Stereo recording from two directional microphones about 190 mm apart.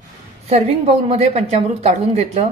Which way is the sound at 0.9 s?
35° right (ahead or behind).